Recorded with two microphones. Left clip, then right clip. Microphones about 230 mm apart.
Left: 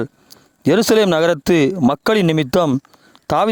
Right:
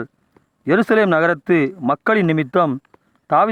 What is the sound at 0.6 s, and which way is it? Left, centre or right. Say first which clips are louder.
Speech: left 2 dB; left.